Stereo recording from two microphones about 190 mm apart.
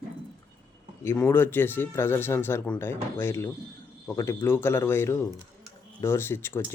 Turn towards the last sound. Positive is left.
turn(degrees=15)  # may be behind; listen again after turning